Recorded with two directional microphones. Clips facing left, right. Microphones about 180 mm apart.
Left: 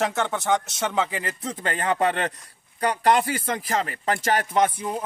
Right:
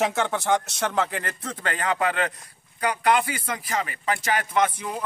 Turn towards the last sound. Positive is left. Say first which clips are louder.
# left 2 dB
turn(degrees=35)  # may be behind; listen again after turning